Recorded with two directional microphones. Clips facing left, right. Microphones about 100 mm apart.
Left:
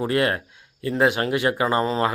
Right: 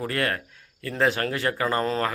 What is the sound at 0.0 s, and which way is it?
Speech, 20° left (ahead or behind).